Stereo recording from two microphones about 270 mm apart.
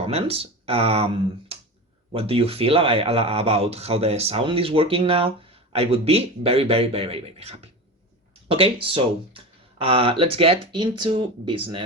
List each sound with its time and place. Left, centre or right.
0.1 s speech: right
2.1 s speech: right